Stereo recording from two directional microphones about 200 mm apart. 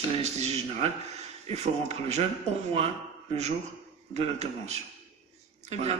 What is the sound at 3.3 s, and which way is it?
A man's voice, 35° right (ahead or behind).